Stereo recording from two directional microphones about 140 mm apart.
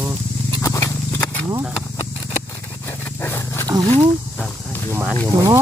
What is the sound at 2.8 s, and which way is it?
Wild animals, 15° left (ahead or behind).